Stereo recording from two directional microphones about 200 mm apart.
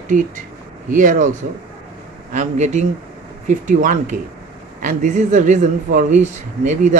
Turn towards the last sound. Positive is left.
turn(degrees=-35)  # may be behind; listen again after turning